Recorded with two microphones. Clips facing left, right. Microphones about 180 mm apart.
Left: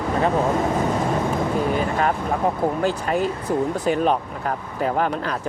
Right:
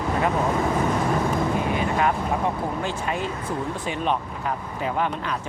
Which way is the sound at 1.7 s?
40° left (ahead or behind).